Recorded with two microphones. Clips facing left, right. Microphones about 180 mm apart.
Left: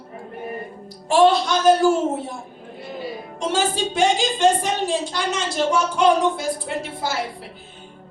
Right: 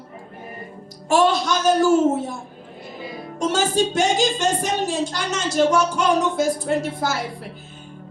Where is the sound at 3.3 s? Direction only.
45° right (ahead or behind).